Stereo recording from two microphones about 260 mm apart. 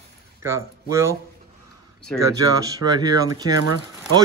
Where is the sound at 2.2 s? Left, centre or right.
Centre.